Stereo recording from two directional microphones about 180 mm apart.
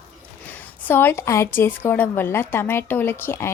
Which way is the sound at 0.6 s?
10° left (ahead or behind).